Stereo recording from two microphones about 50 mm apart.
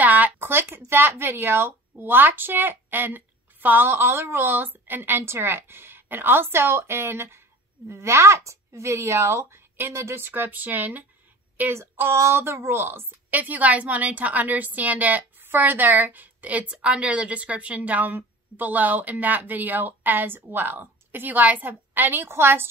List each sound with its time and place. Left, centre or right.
0.0 s a sound: right
0.4 s speech: right
7.9 s a woman's voice: right
12.2 s speech: right
13.3 s a woman's voice: right